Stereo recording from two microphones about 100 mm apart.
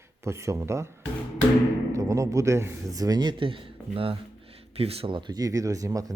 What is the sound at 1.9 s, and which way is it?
Speech, 30° right (ahead or behind).